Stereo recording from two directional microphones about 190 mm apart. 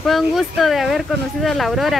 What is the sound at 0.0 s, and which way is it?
Speech, centre (ahead or behind).